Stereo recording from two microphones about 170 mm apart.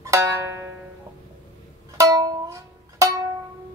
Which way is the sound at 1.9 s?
20° right (ahead or behind).